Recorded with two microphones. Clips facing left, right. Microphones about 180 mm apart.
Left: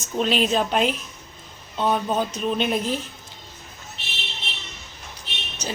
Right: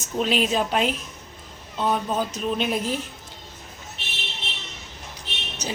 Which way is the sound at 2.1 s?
Centre (ahead or behind).